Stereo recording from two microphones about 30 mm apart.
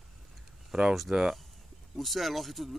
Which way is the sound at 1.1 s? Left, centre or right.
Right.